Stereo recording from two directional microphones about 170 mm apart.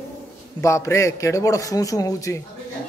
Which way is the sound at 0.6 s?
15° left (ahead or behind).